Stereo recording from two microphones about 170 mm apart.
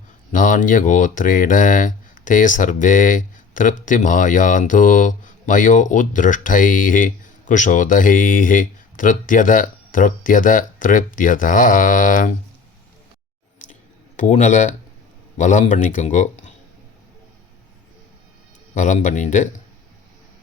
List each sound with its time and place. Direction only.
0.3 s speech: 50° left (ahead or behind)
14.2 s speech: 45° left (ahead or behind)
18.7 s speech: 45° left (ahead or behind)